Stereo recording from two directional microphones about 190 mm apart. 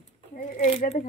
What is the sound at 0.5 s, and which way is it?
Speech, 35° left (ahead or behind).